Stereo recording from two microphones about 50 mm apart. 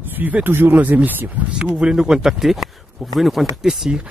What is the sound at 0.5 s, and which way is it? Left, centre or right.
Speech, right.